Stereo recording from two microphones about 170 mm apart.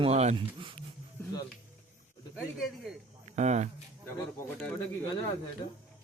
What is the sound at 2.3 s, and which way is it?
Speech, 5° right (ahead or behind).